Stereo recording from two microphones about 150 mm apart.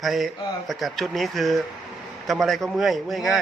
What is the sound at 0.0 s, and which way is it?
Speech, centre (ahead or behind).